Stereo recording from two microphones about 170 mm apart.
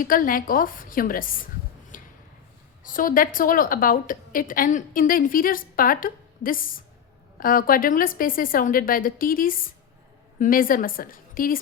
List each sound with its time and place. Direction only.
0.0 s a woman's voice: 55° left (ahead or behind)
1.9 s a sound: 55° left (ahead or behind)
2.8 s a woman's voice: 55° left (ahead or behind)